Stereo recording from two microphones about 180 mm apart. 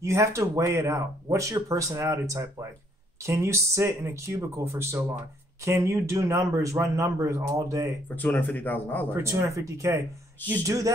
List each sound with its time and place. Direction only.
0.0 s speech: 15° right (ahead or behind)
8.2 s speech: 10° left (ahead or behind)
9.1 s speech: 15° right (ahead or behind)